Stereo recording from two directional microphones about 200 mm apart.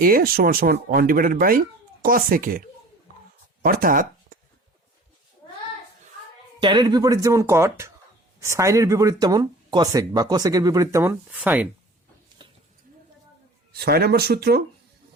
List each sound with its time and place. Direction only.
0.0 s speech: 45° right (ahead or behind)
3.6 s speech: 45° right (ahead or behind)
6.6 s speech: 20° right (ahead or behind)
13.7 s speech: 50° right (ahead or behind)